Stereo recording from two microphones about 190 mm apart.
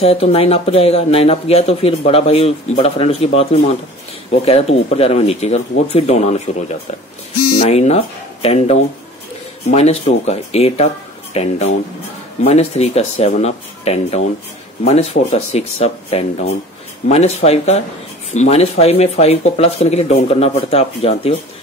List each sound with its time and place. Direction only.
0.0 s speech: 30° left (ahead or behind)